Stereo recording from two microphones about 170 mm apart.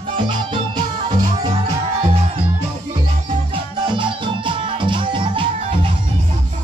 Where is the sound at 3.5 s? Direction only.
30° right (ahead or behind).